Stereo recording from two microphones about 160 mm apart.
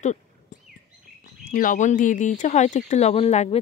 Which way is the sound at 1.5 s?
55° left (ahead or behind).